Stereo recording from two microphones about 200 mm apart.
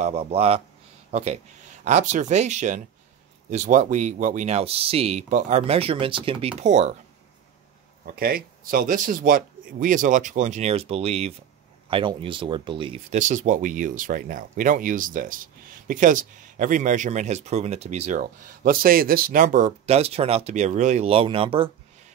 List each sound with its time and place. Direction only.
0.0 s speech: 30° right (ahead or behind)
8.0 s speech: 50° right (ahead or behind); by 21.6 s 25° right (ahead or behind)